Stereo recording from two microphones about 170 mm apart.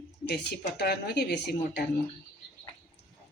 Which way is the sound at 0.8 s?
75° left (ahead or behind).